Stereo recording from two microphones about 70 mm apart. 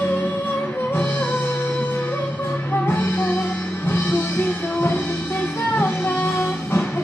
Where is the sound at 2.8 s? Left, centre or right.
Left.